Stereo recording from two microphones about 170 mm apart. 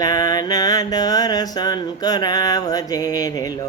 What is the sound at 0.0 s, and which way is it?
Mantra, 20° left (ahead or behind).